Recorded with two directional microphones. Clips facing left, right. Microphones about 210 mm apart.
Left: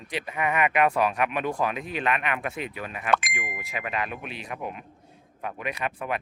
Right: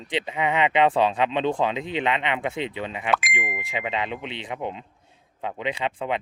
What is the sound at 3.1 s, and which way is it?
Speech, centre (ahead or behind).